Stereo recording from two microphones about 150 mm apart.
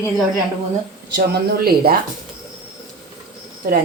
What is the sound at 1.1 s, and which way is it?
Speech, 90° right.